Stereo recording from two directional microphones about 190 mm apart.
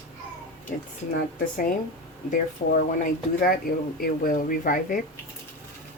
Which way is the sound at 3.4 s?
50° left (ahead or behind).